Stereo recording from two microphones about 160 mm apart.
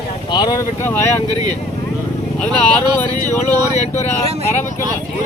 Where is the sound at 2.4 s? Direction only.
10° left (ahead or behind).